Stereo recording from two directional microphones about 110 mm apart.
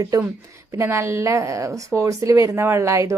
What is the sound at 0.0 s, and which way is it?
A woman's voice, 30° right (ahead or behind).